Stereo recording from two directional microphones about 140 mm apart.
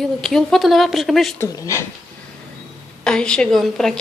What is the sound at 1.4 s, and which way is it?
Speech, 20° left (ahead or behind).